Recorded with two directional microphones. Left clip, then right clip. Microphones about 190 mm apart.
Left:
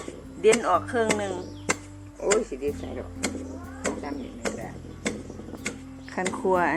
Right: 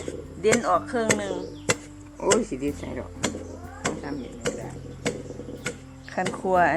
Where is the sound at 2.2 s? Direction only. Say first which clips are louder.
Right 1 dB; 60° right (ahead or behind).